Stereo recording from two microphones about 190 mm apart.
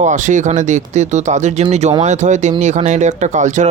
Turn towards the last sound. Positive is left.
turn(degrees=-40)  # may be behind; listen again after turning